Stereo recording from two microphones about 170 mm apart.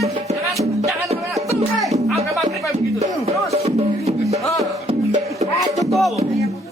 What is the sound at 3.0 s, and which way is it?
Music, 40° right (ahead or behind).